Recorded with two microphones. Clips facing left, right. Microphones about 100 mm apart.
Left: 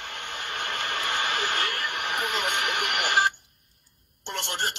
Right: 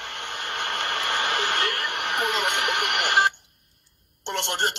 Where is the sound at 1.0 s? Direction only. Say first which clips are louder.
Right 2 dB; 50° right (ahead or behind).